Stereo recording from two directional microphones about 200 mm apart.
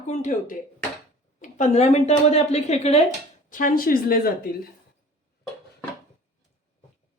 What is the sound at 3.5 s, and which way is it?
Speech, 45° left (ahead or behind).